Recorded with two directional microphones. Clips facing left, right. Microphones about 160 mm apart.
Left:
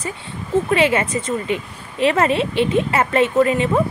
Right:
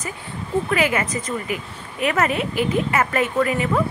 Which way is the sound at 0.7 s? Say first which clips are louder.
Left 4 dB; 25° left (ahead or behind).